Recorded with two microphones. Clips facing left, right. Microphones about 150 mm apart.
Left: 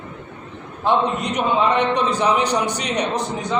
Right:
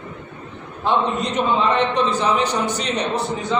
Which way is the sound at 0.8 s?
15° left (ahead or behind).